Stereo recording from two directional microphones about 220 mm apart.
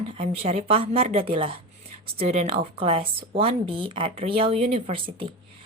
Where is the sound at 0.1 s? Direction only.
25° right (ahead or behind).